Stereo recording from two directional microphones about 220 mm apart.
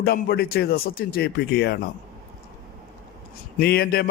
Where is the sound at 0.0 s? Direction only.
45° left (ahead or behind).